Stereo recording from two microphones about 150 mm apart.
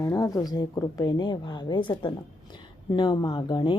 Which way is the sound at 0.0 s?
25° left (ahead or behind).